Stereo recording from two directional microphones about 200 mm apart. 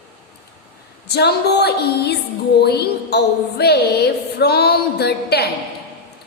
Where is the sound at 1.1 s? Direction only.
55° left (ahead or behind).